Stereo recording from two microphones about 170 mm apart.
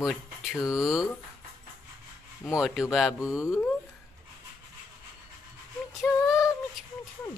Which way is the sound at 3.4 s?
15° left (ahead or behind).